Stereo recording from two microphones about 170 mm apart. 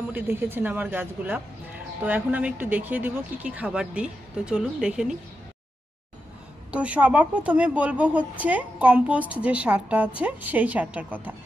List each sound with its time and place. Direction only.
0.1 s speech: 10° right (ahead or behind)
6.7 s speech: 5° right (ahead or behind)